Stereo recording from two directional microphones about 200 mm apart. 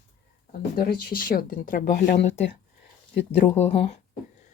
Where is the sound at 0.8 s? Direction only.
50° left (ahead or behind).